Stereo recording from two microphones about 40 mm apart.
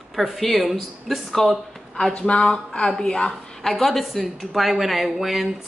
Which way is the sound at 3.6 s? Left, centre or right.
Centre.